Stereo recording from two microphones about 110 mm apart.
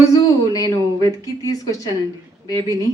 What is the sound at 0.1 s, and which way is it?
A woman's voice, 35° left (ahead or behind).